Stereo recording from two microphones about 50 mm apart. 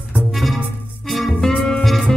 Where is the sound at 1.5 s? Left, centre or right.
Centre.